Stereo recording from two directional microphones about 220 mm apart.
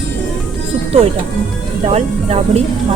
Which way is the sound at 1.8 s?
30° right (ahead or behind).